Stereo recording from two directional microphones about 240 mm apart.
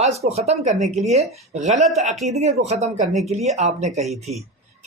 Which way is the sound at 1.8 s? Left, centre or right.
Centre.